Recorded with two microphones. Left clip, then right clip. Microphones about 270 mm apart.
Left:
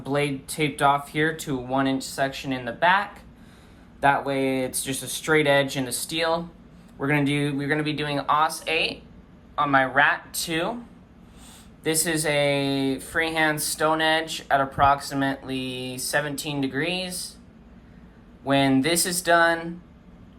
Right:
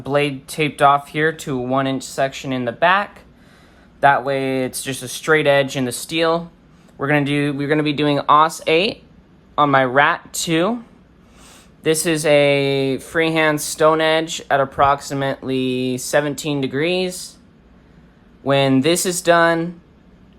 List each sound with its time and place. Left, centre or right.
0.0 s speech: right
11.8 s speech: right
18.4 s speech: right